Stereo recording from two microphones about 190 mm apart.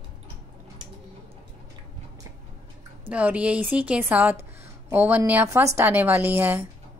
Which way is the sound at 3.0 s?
5° right (ahead or behind).